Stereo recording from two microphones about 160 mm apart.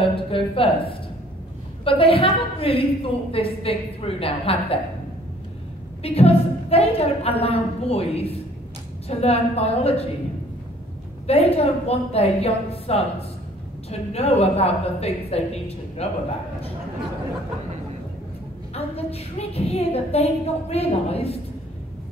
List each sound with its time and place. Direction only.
0.1 s a woman's voice: 35° left (ahead or behind)
6.0 s a woman's voice: 40° left (ahead or behind)
11.2 s a woman's voice: 40° left (ahead or behind)
18.7 s a woman's voice: 40° left (ahead or behind)